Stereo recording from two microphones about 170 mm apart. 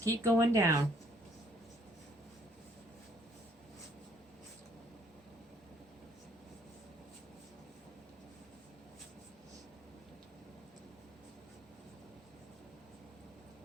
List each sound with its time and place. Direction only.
0.0 s speech: 20° right (ahead or behind)